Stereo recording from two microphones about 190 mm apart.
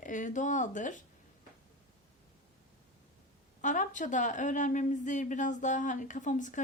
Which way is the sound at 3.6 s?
40° left (ahead or behind).